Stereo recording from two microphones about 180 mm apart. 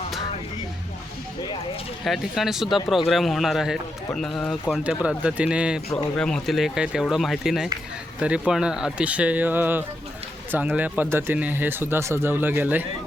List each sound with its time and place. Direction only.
2.0 s a man's voice: centre (ahead or behind)
5.0 s a man's voice: 5° right (ahead or behind)